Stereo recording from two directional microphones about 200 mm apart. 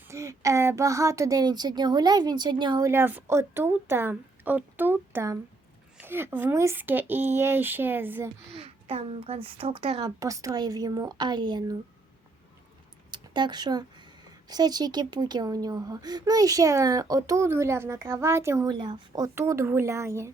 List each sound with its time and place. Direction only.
0.1 s speech: 15° right (ahead or behind)
8.5 s speech: 30° right (ahead or behind)
10.2 s speech: 15° right (ahead or behind)
13.1 s speech: 20° right (ahead or behind)